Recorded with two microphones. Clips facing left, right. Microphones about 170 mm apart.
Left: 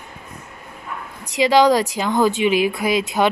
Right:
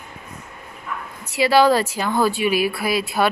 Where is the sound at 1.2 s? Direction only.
15° left (ahead or behind).